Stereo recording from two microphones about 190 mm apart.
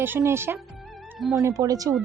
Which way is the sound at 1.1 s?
Centre (ahead or behind).